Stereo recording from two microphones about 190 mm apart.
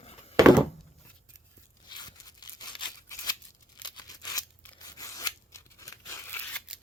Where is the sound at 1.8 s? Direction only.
20° left (ahead or behind).